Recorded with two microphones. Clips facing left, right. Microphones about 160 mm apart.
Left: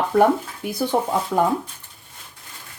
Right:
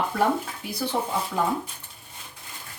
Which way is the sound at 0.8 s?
50° left (ahead or behind).